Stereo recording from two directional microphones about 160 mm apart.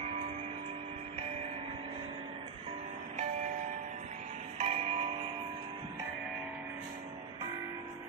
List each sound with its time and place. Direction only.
4.6 s music: 40° right (ahead or behind)